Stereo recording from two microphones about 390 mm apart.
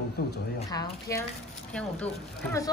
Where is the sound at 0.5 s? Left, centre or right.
Centre.